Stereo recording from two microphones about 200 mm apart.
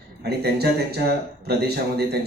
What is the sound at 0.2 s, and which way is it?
A man's voice, 55° right (ahead or behind).